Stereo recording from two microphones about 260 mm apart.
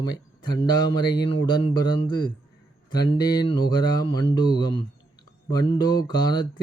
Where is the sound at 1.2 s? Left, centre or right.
Centre.